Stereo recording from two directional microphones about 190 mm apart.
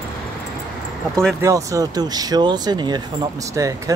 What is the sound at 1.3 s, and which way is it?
Speech, 15° right (ahead or behind).